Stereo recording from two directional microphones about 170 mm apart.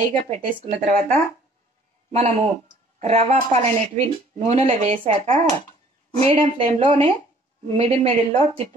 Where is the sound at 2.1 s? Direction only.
40° right (ahead or behind).